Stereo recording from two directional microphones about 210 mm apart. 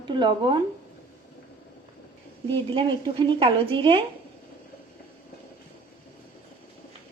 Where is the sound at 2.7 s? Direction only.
25° right (ahead or behind).